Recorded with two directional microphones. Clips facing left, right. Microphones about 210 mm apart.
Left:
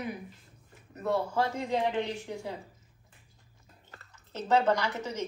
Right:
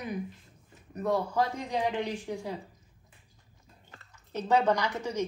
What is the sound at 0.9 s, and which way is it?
Speech, 15° right (ahead or behind).